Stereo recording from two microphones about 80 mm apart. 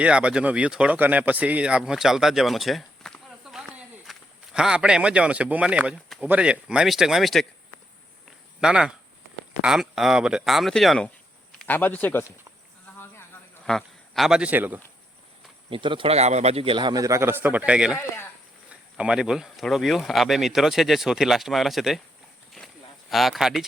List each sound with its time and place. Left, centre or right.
0.0 s speech: centre
3.5 s snake: centre
4.5 s speech: centre
8.6 s speech: centre
11.7 s a man's voice: left
13.7 s a sound: centre
14.3 s speech: centre
14.5 s a man's voice: right
15.7 s speech: right
16.9 s a man's voice: right
17.2 s a man's voice: right
17.7 s speech: centre
23.0 s speech: centre